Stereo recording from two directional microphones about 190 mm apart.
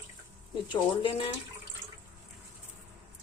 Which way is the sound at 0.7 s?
30° left (ahead or behind).